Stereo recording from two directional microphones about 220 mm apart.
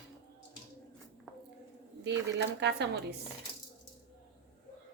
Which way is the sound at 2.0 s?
50° right (ahead or behind).